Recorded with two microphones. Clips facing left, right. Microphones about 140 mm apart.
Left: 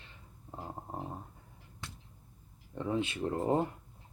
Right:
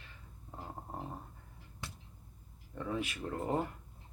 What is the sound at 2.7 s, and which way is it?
Speech, 25° left (ahead or behind).